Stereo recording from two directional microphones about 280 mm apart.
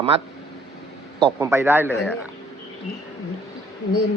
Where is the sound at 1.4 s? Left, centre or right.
Centre.